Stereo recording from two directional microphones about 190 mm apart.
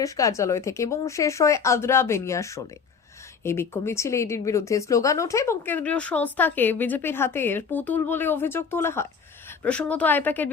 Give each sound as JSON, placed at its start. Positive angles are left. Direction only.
{"t": 0.0, "sound": "speech", "side_deg": 15}